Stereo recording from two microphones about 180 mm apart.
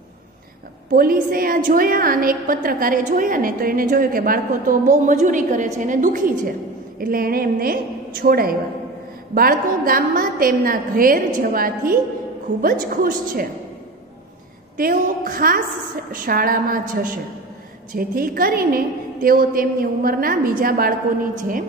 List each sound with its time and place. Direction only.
0.9 s a woman's voice: 55° right (ahead or behind)
14.8 s a woman's voice: 50° right (ahead or behind)